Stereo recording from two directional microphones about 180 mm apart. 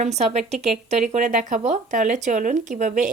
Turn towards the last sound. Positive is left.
turn(degrees=-45)  # may be behind; listen again after turning